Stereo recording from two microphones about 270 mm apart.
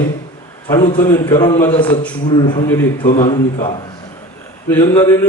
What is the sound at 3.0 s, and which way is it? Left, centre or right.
A man's voice, left.